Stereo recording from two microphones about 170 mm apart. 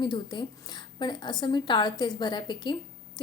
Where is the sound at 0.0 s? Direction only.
25° left (ahead or behind).